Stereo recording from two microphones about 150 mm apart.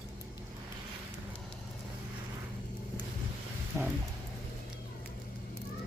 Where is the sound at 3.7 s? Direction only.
15° right (ahead or behind).